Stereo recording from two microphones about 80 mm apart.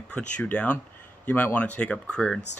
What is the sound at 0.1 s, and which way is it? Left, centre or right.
Speech, centre.